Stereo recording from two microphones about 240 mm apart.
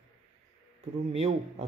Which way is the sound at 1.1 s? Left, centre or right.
Right.